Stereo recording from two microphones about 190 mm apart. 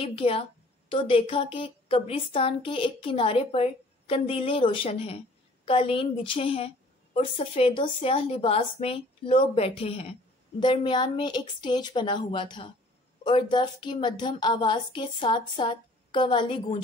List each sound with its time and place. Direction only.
0.0 s a woman's voice: 30° left (ahead or behind)